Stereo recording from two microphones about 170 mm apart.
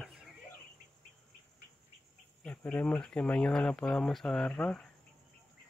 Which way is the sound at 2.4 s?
10° left (ahead or behind).